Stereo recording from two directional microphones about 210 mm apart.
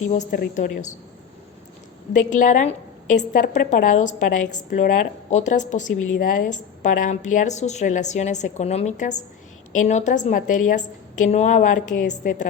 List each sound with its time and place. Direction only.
0.1 s a woman's voice: 40° left (ahead or behind)
2.1 s a woman's voice: 35° left (ahead or behind)